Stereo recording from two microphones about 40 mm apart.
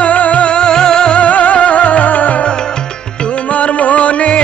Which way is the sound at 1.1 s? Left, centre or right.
Left.